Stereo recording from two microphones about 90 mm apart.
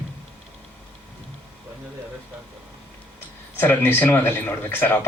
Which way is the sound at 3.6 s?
25° left (ahead or behind).